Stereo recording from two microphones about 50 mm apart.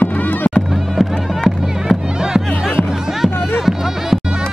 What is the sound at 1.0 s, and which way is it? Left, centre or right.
Music, centre.